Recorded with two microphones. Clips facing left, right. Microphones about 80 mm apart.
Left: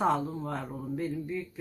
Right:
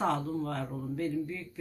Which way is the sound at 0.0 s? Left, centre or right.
Centre.